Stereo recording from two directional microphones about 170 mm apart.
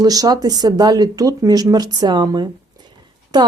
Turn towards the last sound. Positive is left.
turn(degrees=-25)  # may be behind; listen again after turning